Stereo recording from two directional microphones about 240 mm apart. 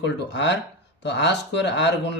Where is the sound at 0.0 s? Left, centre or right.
Left.